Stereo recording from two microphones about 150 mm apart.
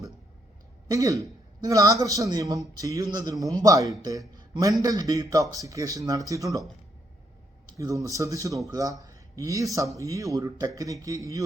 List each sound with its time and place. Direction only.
0.9 s speech: 20° right (ahead or behind)
7.8 s speech: 20° right (ahead or behind)